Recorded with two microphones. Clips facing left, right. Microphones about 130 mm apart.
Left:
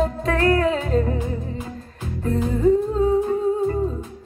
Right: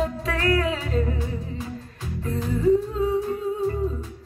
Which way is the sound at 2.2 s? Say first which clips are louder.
Left 3 dB; 35° left (ahead or behind).